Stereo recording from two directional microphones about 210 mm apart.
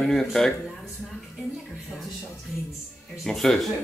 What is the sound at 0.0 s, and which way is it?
Speech, centre (ahead or behind).